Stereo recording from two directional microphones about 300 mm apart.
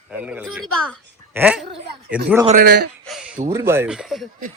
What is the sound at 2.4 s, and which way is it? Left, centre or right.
Speech, right.